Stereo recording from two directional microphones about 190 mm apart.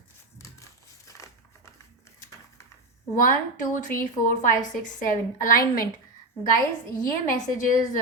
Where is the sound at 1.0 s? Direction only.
15° left (ahead or behind).